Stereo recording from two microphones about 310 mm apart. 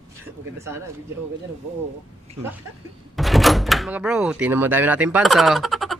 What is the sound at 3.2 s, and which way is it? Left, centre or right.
Speech, centre.